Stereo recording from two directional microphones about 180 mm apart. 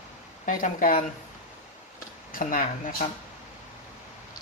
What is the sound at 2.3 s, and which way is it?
Speech, 50° left (ahead or behind).